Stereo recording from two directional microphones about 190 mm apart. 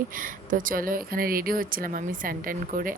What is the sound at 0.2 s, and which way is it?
Speech, 45° right (ahead or behind).